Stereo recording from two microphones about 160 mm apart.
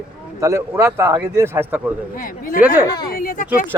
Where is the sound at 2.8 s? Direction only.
25° left (ahead or behind).